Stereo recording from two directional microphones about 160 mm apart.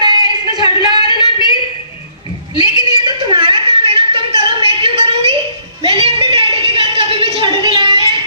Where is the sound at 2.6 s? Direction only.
30° right (ahead or behind).